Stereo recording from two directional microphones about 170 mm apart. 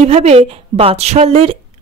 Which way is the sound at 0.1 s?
40° right (ahead or behind).